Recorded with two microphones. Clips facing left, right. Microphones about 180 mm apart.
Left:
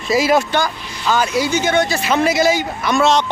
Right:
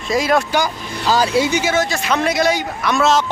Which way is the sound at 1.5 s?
15° right (ahead or behind).